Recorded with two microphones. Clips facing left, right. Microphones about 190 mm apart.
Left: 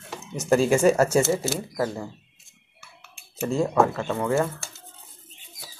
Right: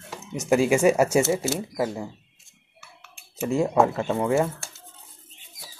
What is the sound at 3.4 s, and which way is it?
Speech, 15° right (ahead or behind).